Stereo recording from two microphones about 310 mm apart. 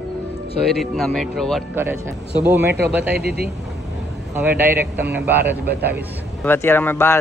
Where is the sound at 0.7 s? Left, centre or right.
Centre.